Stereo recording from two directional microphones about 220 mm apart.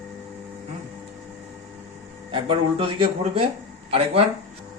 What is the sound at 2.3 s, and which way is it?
Speech, 25° right (ahead or behind).